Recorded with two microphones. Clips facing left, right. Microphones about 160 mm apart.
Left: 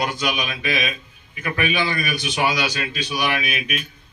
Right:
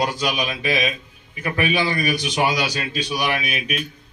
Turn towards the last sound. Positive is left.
turn(degrees=-35)  # may be behind; listen again after turning